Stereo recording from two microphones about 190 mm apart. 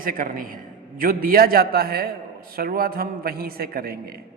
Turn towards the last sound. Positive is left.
turn(degrees=-50)  # may be behind; listen again after turning